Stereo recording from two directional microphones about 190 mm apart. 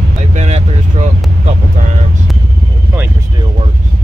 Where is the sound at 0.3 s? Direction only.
35° right (ahead or behind).